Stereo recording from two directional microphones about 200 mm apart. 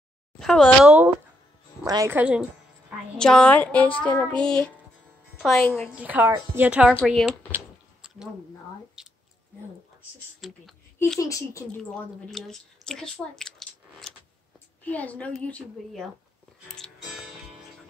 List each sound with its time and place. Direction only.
0.4 s a woman's voice: centre (ahead or behind)
3.2 s a woman's voice: 5° left (ahead or behind)
9.0 s a sound: 5° right (ahead or behind)
10.4 s a woman's voice: centre (ahead or behind)
11.0 s a woman's voice: 15° left (ahead or behind)
11.9 s a woman's voice: centre (ahead or behind)
16.6 s music: 5° left (ahead or behind)